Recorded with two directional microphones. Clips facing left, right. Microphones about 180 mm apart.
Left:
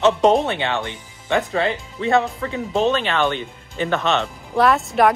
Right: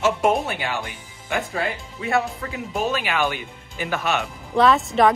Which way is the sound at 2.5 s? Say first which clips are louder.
Left 6 dB; 25° left (ahead or behind).